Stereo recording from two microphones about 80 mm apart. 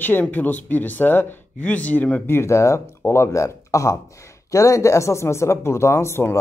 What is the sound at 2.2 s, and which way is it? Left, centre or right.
Speech, left.